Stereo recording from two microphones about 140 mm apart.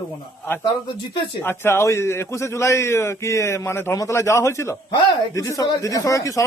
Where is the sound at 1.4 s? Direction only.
15° left (ahead or behind).